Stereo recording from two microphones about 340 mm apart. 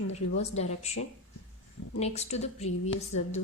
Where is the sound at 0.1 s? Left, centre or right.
Centre.